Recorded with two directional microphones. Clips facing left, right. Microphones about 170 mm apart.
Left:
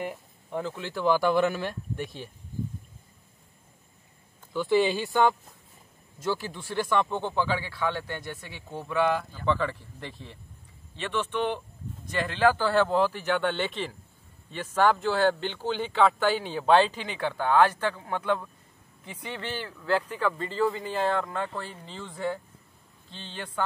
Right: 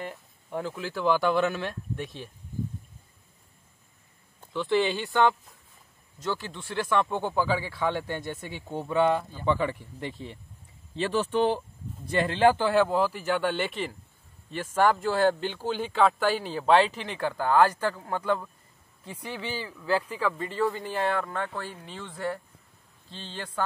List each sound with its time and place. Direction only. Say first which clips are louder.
0.5 s speech: even; centre (ahead or behind)
4.6 s speech: left 2 dB; 5° left (ahead or behind); by 10.3 s 20° right (ahead or behind)
11.0 s speech: right 4 dB; 35° right (ahead or behind); by 22.4 s centre (ahead or behind)